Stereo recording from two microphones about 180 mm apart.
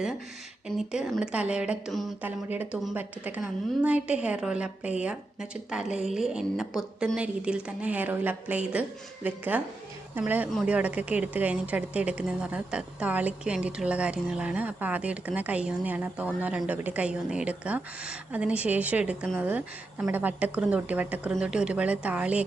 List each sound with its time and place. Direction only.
0.8 s a woman's voice: 5° right (ahead or behind)